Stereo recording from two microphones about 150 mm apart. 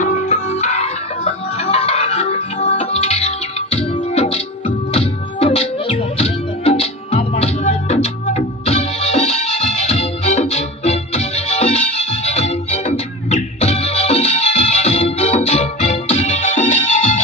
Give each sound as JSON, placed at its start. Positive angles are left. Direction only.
{"t": 0.0, "sound": "music", "side_deg": 55}